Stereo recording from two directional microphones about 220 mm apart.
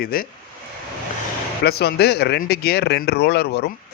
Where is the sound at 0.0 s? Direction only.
40° left (ahead or behind).